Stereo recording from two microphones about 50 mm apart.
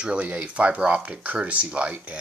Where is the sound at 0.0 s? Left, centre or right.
Right.